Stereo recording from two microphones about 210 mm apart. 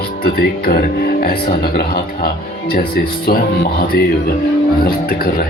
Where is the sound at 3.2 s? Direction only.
45° left (ahead or behind).